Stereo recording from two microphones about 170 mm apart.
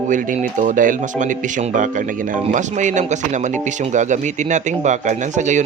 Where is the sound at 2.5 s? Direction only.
45° right (ahead or behind).